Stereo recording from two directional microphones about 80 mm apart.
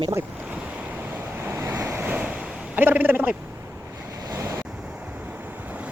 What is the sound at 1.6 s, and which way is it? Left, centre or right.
Waves, right.